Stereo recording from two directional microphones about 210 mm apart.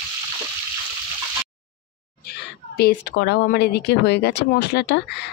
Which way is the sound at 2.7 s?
50° left (ahead or behind).